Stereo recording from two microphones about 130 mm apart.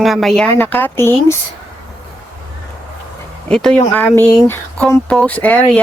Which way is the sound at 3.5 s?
5° left (ahead or behind).